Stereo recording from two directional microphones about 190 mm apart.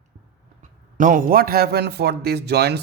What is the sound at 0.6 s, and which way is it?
A man's voice, 45° right (ahead or behind).